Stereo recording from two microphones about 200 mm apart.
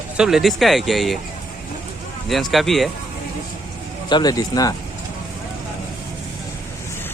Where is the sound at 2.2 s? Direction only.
Centre (ahead or behind).